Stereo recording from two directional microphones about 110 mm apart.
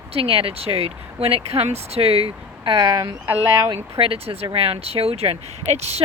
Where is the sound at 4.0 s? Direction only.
60° right (ahead or behind).